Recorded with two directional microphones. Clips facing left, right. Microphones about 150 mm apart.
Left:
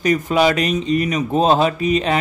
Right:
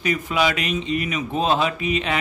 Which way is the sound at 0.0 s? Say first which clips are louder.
Left 6 dB; 40° left (ahead or behind).